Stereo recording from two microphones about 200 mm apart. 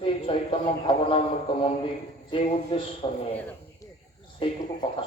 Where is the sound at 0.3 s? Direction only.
25° left (ahead or behind).